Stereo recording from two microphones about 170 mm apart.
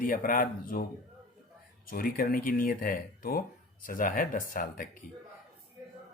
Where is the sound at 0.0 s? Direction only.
55° left (ahead or behind).